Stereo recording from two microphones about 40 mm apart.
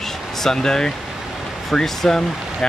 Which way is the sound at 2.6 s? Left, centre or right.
Centre.